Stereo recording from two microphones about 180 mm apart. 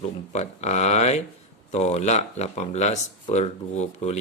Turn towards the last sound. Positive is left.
turn(degrees=40)  # may be behind; listen again after turning